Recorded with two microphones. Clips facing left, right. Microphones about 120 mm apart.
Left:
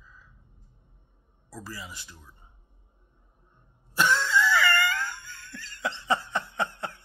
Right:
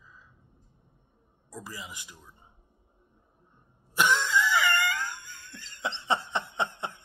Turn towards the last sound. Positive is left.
turn(degrees=-20)  # may be behind; listen again after turning